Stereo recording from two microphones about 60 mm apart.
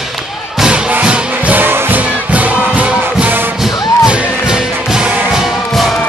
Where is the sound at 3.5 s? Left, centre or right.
Centre.